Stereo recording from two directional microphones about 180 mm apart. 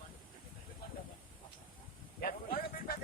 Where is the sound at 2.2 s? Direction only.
55° left (ahead or behind).